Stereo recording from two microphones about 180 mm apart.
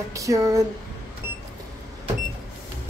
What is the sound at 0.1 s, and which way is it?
Speech, 20° right (ahead or behind).